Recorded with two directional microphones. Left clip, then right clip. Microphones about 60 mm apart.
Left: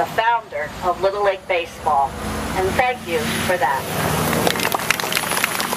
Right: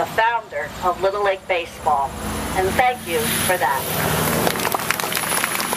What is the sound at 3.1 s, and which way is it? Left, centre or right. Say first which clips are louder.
Speech: even; right.